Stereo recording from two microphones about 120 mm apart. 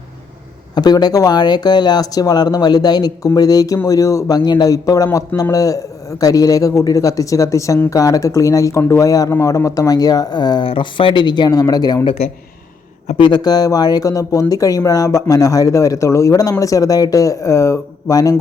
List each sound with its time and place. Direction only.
0.8 s speech: 35° left (ahead or behind)
13.1 s speech: 40° left (ahead or behind)